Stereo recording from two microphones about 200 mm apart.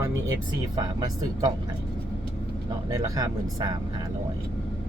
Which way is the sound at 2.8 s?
15° right (ahead or behind).